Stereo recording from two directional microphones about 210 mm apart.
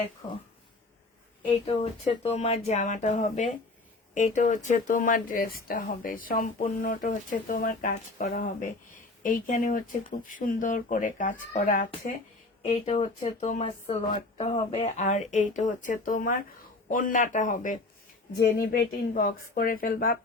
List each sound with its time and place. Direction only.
1.6 s speech: 30° left (ahead or behind)
12.6 s speech: 30° left (ahead or behind)
18.3 s speech: 50° left (ahead or behind)